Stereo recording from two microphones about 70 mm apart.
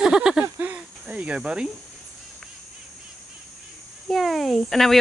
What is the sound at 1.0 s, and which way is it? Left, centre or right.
Cricket, centre.